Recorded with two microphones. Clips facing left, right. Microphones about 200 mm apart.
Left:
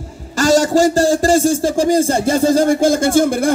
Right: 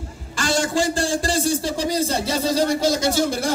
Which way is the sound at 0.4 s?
40° left (ahead or behind).